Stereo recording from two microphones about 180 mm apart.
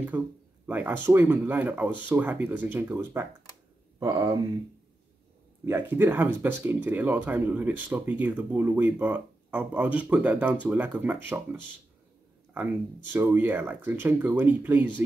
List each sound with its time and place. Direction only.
0.1 s speech: 10° right (ahead or behind)
5.7 s speech: 10° right (ahead or behind)
12.5 s speech: 10° right (ahead or behind)